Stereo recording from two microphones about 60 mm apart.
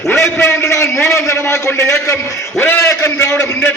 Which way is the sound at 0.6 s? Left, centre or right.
Left.